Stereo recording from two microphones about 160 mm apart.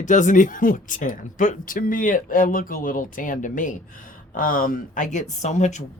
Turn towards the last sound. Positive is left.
turn(degrees=45)  # may be behind; listen again after turning